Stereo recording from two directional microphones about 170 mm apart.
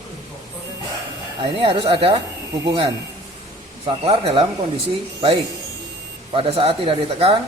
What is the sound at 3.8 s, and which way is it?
Speech, 35° right (ahead or behind).